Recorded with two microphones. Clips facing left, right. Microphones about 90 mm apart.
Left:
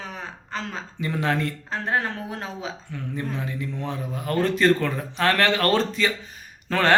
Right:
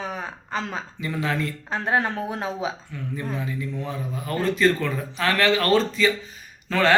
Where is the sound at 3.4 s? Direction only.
60° left (ahead or behind).